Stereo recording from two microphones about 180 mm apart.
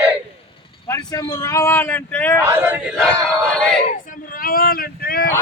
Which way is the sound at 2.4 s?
10° right (ahead or behind).